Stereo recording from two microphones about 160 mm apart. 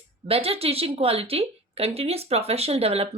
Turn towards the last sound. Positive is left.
turn(degrees=-40)  # may be behind; listen again after turning